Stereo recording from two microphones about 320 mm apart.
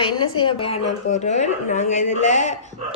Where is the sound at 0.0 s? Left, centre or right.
Centre.